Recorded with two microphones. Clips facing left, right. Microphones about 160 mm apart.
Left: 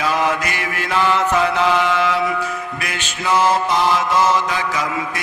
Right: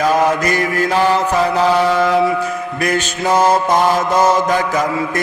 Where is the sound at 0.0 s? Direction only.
45° right (ahead or behind).